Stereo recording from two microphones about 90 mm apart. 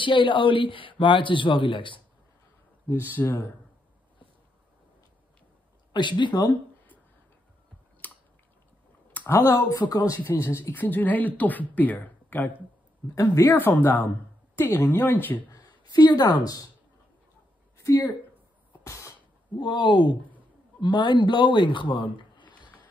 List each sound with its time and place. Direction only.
0.0 s a man's voice: 65° left (ahead or behind)
2.9 s speech: 20° left (ahead or behind)
5.9 s speech: 60° left (ahead or behind)
8.0 s a sound: 20° left (ahead or behind)
9.8 s speech: 45° left (ahead or behind)
10.3 s speech: 30° left (ahead or behind)
13.1 s speech: 40° left (ahead or behind)
13.5 s speech: 25° left (ahead or behind)
15.5 s a woman's voice: 50° left (ahead or behind)
17.7 s a sound: 35° left (ahead or behind)
19.6 s a man's voice: 60° left (ahead or behind)